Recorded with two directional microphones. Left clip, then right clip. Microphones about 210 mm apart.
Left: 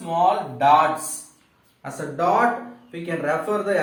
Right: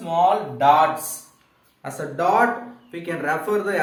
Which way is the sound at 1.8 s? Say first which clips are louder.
Right 1 dB; 50° right (ahead or behind).